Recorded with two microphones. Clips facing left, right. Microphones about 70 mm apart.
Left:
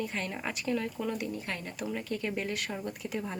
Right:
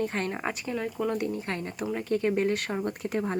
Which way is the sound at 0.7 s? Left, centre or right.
Centre.